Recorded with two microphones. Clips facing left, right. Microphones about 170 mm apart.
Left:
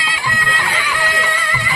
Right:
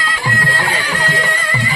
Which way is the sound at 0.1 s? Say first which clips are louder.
Right 2 dB; 45° right (ahead or behind).